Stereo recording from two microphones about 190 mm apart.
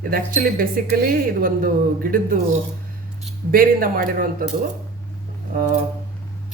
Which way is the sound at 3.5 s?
50° right (ahead or behind).